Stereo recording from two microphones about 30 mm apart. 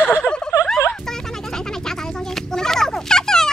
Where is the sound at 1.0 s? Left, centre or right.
Centre.